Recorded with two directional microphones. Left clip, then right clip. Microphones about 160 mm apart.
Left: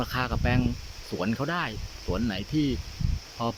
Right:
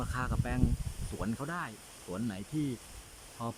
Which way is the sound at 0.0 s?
15° left (ahead or behind).